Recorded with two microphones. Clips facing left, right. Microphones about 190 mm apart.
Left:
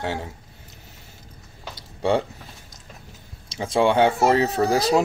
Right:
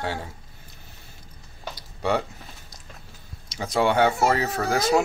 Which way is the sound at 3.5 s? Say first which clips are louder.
Left 3 dB; 25° left (ahead or behind).